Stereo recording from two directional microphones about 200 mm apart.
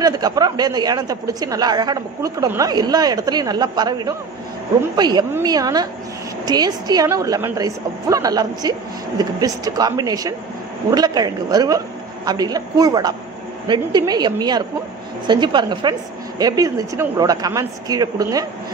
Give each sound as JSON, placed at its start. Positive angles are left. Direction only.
{"t": 0.0, "sound": "a woman's voice", "side_deg": -20}